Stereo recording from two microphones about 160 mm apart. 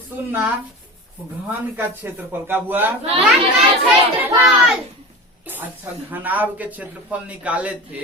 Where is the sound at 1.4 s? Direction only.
10° right (ahead or behind).